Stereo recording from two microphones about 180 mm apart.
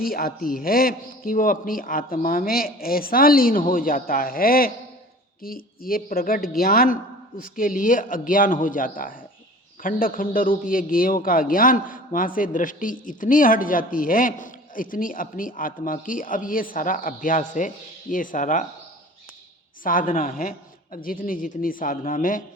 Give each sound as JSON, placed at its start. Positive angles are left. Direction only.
{"t": 0.0, "sound": "a man's voice", "side_deg": 55}
{"t": 19.8, "sound": "a man's voice", "side_deg": 50}